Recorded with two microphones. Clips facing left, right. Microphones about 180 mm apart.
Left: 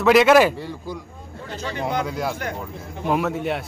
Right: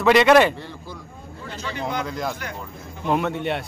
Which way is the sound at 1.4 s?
45° left (ahead or behind).